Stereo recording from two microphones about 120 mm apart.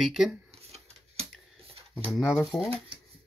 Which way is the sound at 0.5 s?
60° right (ahead or behind).